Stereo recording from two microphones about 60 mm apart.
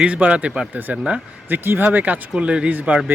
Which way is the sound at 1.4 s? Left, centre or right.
Right.